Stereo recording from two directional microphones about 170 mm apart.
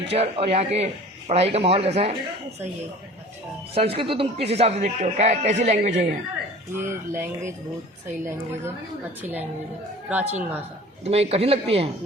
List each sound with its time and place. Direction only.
0.1 s a man's voice: 35° right (ahead or behind)
3.8 s a man's voice: 35° right (ahead or behind)
6.7 s speech: 15° right (ahead or behind)
10.1 s speech: 10° right (ahead or behind)
11.0 s a man's voice: 35° right (ahead or behind)